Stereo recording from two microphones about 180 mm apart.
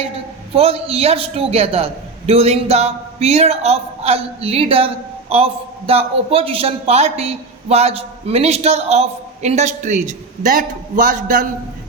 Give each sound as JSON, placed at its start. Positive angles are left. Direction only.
{"t": 0.5, "sound": "a man's voice", "side_deg": -35}